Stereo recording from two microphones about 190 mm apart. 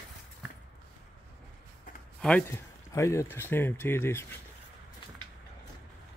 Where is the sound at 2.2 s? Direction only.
5° left (ahead or behind).